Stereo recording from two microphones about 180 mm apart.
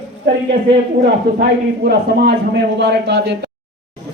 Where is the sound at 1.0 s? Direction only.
60° right (ahead or behind).